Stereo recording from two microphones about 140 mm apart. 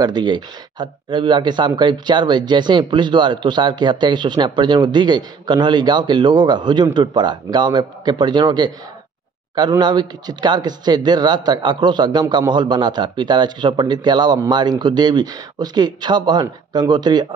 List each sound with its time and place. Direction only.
0.0 s speech: 30° right (ahead or behind)